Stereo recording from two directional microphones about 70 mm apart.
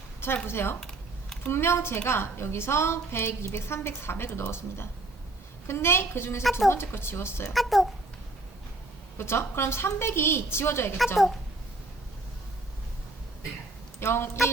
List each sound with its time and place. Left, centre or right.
0.4 s a woman's voice: left
6.4 s speech: centre
6.7 s a woman's voice: left
7.5 s speech: centre
9.1 s a woman's voice: left
14.0 s a woman's voice: left